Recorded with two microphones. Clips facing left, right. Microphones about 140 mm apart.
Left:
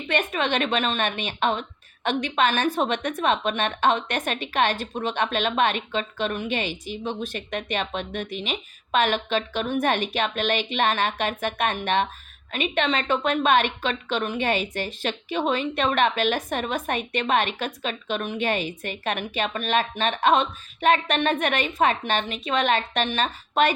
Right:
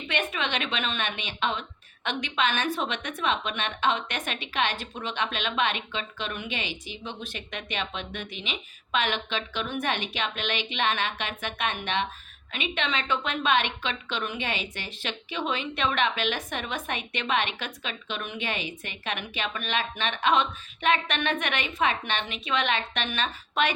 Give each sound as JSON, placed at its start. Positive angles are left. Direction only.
{"t": 0.1, "sound": "a woman's voice", "side_deg": 45}